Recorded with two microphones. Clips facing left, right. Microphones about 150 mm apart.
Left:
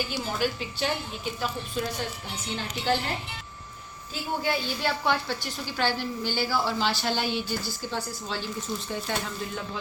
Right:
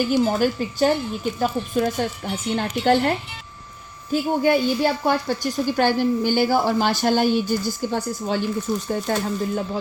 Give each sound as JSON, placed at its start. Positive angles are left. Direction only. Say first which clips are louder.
{"t": 0.3, "sound": "speech", "louder": "right 8 dB", "side_deg": -45}
{"t": 4.1, "sound": "speech", "louder": "right 10 dB", "side_deg": -50}